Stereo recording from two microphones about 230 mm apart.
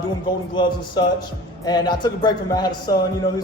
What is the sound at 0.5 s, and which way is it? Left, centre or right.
A man's voice, centre.